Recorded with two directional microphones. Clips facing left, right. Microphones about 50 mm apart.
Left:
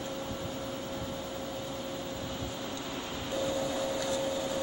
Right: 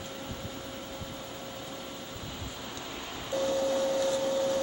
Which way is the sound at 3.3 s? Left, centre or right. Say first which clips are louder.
Right 4 dB; centre.